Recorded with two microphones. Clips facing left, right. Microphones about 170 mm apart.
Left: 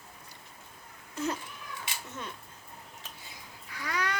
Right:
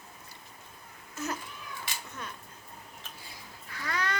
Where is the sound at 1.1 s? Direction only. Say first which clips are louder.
Left 3 dB; 30° left (ahead or behind).